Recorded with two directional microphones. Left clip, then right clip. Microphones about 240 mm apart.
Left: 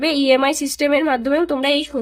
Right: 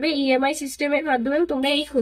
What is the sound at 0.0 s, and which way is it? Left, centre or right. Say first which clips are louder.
Speech: left 5 dB; left.